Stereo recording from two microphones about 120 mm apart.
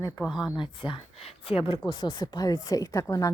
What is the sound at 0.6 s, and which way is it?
A woman's voice, 45° left (ahead or behind).